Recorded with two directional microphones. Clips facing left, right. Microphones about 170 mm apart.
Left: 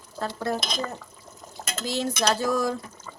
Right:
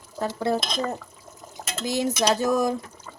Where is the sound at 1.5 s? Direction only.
15° right (ahead or behind).